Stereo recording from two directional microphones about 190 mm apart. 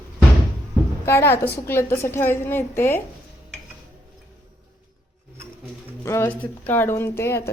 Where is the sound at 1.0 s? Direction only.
15° left (ahead or behind).